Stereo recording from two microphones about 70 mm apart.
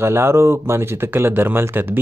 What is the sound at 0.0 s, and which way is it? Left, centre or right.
Speech, right.